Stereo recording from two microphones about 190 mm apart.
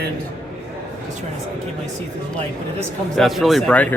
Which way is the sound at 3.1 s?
Centre (ahead or behind).